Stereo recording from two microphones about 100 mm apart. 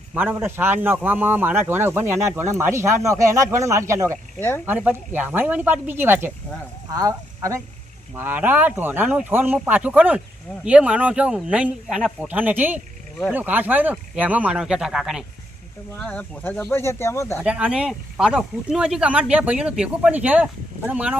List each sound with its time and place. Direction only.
0.1 s speech: 20° right (ahead or behind)
4.4 s speech: 20° left (ahead or behind)
4.6 s speech: 20° right (ahead or behind)
6.9 s speech: 35° right (ahead or behind)
8.1 s speech: 20° right (ahead or behind); by 15.2 s 5° right (ahead or behind)
16.0 s speech: 15° left (ahead or behind)
17.4 s speech: 10° right (ahead or behind)